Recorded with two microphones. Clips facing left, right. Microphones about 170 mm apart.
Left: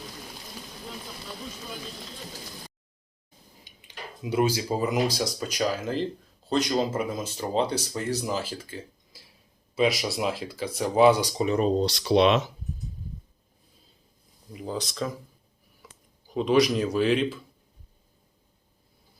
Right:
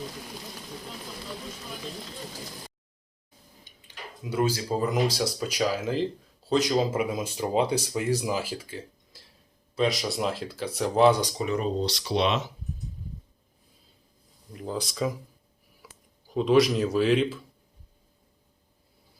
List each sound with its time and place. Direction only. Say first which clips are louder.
3.6 s speech: left 2 dB; 15° left (ahead or behind)
11.3 s speech: left 4 dB; 30° left (ahead or behind)
11.8 s speech: left 5 dB; 55° left (ahead or behind)
14.5 s speech: even; 5° left (ahead or behind)
14.8 s speech: right 4 dB; 10° right (ahead or behind)